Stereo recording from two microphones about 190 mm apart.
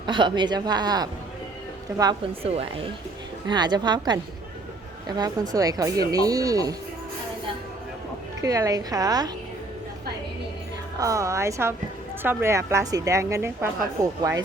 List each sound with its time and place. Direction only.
0.0 s speech: 25° right (ahead or behind)
8.4 s speech: 20° right (ahead or behind)
11.0 s a woman's voice: 15° right (ahead or behind)